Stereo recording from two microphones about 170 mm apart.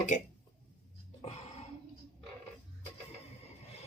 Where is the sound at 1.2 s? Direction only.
40° left (ahead or behind).